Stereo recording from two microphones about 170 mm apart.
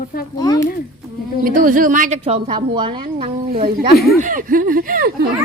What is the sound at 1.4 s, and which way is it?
Speech, 50° right (ahead or behind).